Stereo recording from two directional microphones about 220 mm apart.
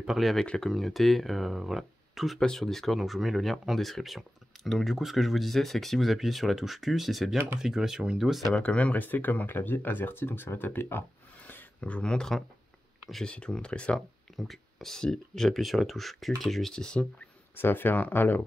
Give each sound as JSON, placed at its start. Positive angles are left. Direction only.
{"t": 0.0, "sound": "speech", "side_deg": 0}